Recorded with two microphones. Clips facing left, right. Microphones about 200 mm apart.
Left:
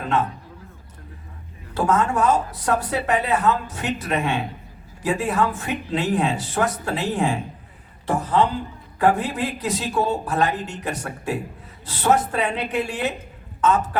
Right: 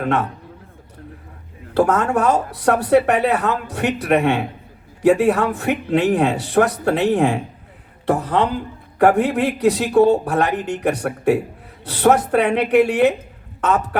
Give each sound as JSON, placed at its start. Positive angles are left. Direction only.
{"t": 0.0, "sound": "a man's voice", "side_deg": -65}
{"t": 1.7, "sound": "speech", "side_deg": -65}